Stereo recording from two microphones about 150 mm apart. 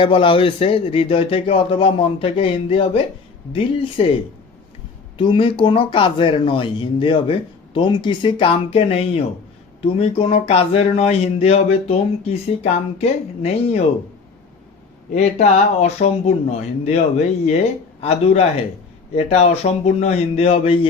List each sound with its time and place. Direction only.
0.0 s speech: 35° left (ahead or behind)
15.1 s speech: 50° left (ahead or behind)
19.1 s speech: 45° left (ahead or behind)